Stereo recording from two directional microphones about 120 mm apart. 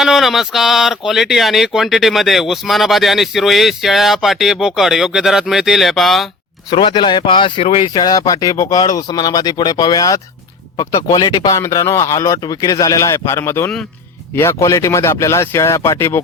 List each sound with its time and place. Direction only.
0.0 s speech: centre (ahead or behind)
6.7 s speech: 40° left (ahead or behind); by 16.2 s 25° left (ahead or behind)